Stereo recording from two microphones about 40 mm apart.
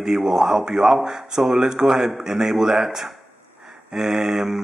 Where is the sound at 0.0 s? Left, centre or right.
Centre.